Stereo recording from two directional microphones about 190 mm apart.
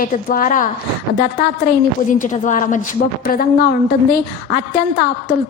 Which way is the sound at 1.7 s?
50° left (ahead or behind).